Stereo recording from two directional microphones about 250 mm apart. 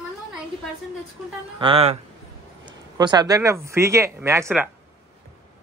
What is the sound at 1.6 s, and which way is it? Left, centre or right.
Speech, right.